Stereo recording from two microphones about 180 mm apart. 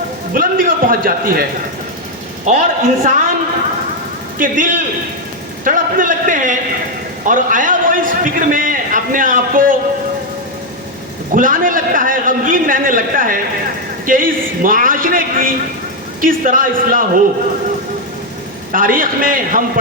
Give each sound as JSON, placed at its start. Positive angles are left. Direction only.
{"t": 0.3, "sound": "a man's voice", "side_deg": -50}
{"t": 2.5, "sound": "a man's voice", "side_deg": -45}
{"t": 4.4, "sound": "a man's voice", "side_deg": -50}
{"t": 11.3, "sound": "a man's voice", "side_deg": -50}
{"t": 18.7, "sound": "a man's voice", "side_deg": -50}